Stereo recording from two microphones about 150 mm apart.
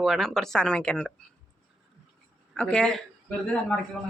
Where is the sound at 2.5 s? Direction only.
5° left (ahead or behind).